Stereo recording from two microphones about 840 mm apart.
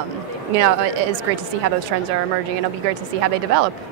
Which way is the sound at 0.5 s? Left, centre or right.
Right.